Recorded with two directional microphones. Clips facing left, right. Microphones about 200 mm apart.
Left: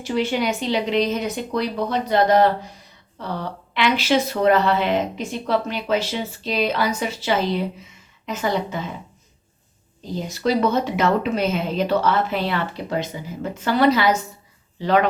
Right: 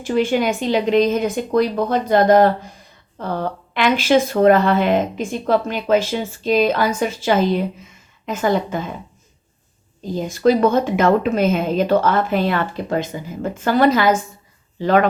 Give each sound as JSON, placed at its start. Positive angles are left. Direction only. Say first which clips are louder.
{"t": 0.0, "sound": "speech", "louder": "right 4 dB", "side_deg": -50}
{"t": 10.0, "sound": "speech", "louder": "right 7 dB", "side_deg": -50}